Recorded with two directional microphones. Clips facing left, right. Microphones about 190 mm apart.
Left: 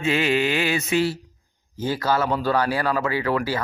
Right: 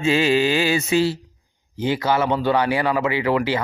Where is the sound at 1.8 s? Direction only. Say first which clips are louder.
Right 2 dB; 20° right (ahead or behind).